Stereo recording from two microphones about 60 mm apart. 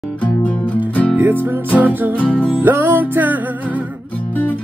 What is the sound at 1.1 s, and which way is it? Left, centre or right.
Music, right.